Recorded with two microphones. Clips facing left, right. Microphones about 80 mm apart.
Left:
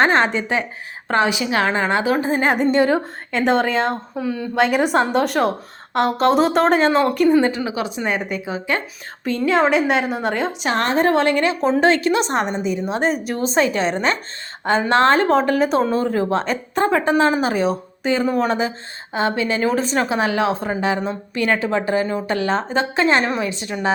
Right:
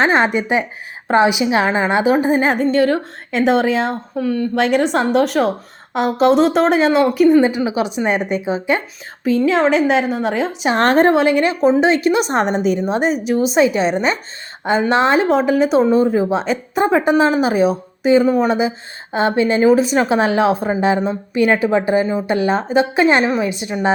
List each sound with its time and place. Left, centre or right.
0.0 s speech: centre
2.6 s speech: centre
3.3 s a woman's voice: centre
4.2 s a woman's voice: centre
7.4 s a woman's voice: centre
9.2 s a woman's voice: centre
11.1 s speech: centre
12.5 s a woman's voice: right
13.2 s speech: centre
19.1 s a woman's voice: right
19.6 s speech: centre
20.1 s a woman's voice: right